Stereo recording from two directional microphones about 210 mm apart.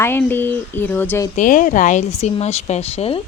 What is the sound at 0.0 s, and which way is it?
Speech, 10° left (ahead or behind).